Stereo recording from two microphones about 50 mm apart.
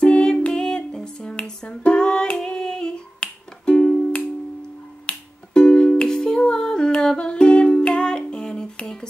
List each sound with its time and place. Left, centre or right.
0.0 s a sound: centre
1.6 s finger snapping: left
5.0 s music: centre